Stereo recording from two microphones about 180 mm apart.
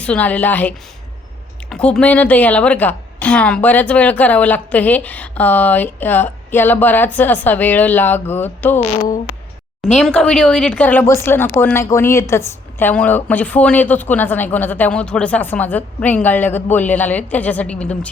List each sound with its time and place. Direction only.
0.0 s speech: 10° left (ahead or behind)
1.7 s speech: 5° left (ahead or behind)
8.8 s speech: 35° left (ahead or behind)
9.8 s speech: 5° left (ahead or behind)